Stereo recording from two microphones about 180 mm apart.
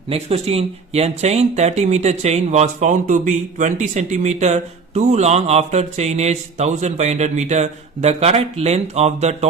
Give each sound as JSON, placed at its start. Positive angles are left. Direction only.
{"t": 0.1, "sound": "speech", "side_deg": -35}